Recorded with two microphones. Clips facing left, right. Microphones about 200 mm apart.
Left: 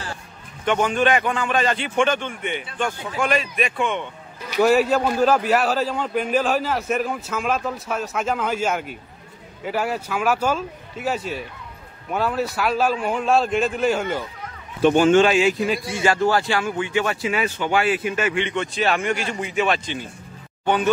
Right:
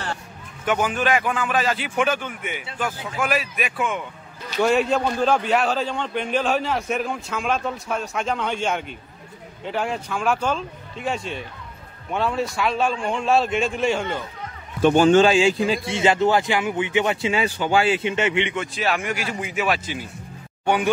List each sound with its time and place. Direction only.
0.7 s a man's voice: 5° right (ahead or behind)
15.0 s speech: 30° right (ahead or behind)
18.5 s a man's voice: 5° right (ahead or behind)